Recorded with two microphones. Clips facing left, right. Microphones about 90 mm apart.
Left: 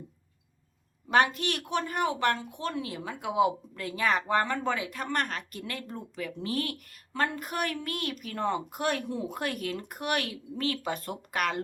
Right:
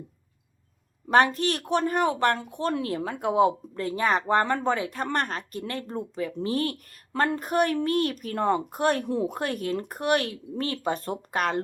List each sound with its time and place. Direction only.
1.0 s speech: 35° right (ahead or behind)
7.1 s speech: 50° right (ahead or behind)
7.3 s speech: 35° right (ahead or behind)
9.4 s speech: 35° right (ahead or behind)